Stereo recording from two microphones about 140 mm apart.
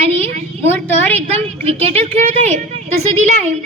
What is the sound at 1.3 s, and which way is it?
A child's voice, 50° right (ahead or behind).